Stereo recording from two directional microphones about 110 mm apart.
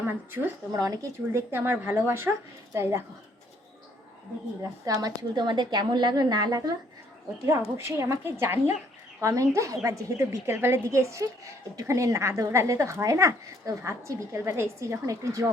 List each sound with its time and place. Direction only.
0.0 s a woman's voice: 20° right (ahead or behind)
0.7 s a woman's voice: 35° right (ahead or behind)
4.9 s a woman's voice: 35° right (ahead or behind)
7.8 s a woman's voice: 25° right (ahead or behind)